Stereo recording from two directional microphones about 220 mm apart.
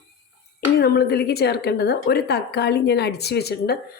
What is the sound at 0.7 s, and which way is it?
A woman's voice, 45° left (ahead or behind).